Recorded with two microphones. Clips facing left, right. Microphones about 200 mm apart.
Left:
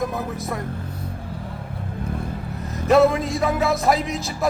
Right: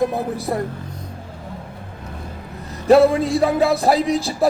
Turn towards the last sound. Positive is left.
turn(degrees=-35)  # may be behind; listen again after turning